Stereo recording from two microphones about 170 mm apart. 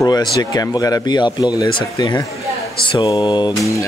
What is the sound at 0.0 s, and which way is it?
Speech, 20° left (ahead or behind).